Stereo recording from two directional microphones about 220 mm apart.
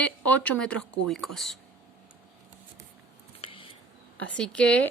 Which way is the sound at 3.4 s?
25° left (ahead or behind).